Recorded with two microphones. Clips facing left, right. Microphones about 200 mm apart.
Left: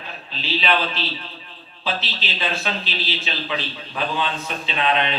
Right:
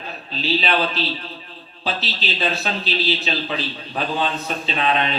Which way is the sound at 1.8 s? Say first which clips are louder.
Right 1 dB; 40° right (ahead or behind).